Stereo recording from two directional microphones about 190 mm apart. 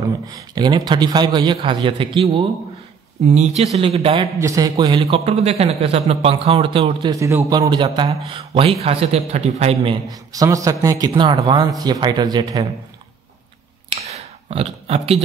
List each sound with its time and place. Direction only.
0.3 s a man's voice: 20° right (ahead or behind)
4.4 s a man's voice: 15° right (ahead or behind); by 9.9 s 35° right (ahead or behind)
10.0 s a man's voice: 20° right (ahead or behind)
13.8 s a sound: 30° right (ahead or behind)